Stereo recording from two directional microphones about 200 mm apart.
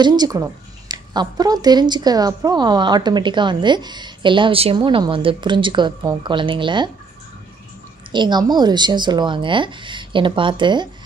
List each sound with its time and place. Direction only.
0.0 s speech: 20° right (ahead or behind)
8.1 s speech: 20° right (ahead or behind)